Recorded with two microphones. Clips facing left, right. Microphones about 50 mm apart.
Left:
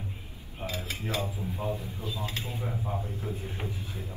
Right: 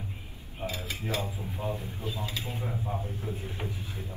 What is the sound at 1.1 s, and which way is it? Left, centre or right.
A man's voice, right.